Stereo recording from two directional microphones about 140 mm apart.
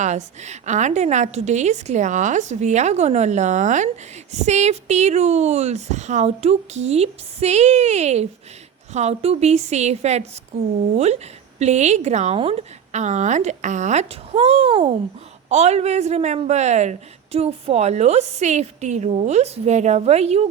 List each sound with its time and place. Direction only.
0.0 s a woman's voice: 55° right (ahead or behind); by 14.8 s 40° right (ahead or behind)
15.4 s a woman's voice: 55° right (ahead or behind)